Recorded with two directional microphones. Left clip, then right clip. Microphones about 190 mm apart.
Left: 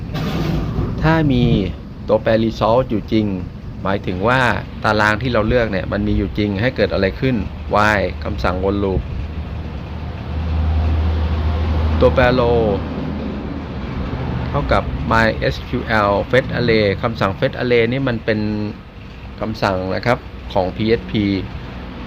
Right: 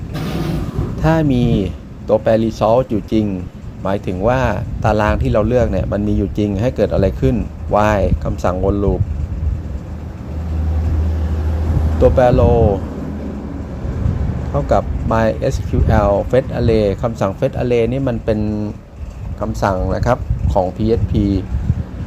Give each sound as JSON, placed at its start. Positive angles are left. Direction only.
{"t": 0.9, "sound": "speech", "side_deg": -20}
{"t": 12.0, "sound": "speech", "side_deg": -15}
{"t": 14.5, "sound": "speech", "side_deg": -15}
{"t": 19.6, "sound": "speech", "side_deg": 0}
{"t": 20.7, "sound": "speech", "side_deg": -15}